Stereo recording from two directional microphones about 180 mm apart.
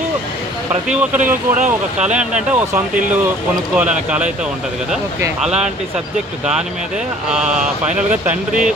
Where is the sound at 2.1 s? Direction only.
5° right (ahead or behind).